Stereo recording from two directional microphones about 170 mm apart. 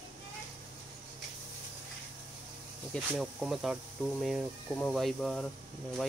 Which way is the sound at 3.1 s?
5° right (ahead or behind).